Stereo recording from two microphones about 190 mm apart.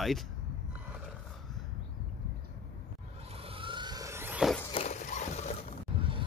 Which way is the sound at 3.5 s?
25° right (ahead or behind).